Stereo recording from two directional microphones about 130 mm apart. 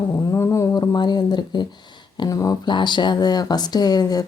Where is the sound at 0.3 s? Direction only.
25° left (ahead or behind).